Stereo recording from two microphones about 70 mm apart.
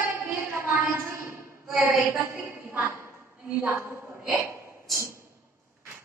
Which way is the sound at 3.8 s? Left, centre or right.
Right.